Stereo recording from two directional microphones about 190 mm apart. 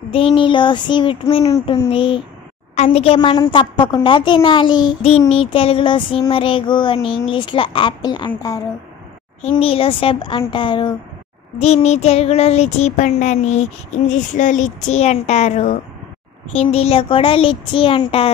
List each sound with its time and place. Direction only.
0.1 s a woman's voice: 30° left (ahead or behind)
9.6 s a woman's voice: 30° left (ahead or behind)
11.6 s child singing: 35° left (ahead or behind)
16.5 s a woman's voice: 35° left (ahead or behind)